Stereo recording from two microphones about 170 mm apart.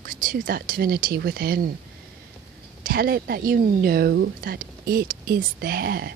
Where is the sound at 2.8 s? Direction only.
60° right (ahead or behind).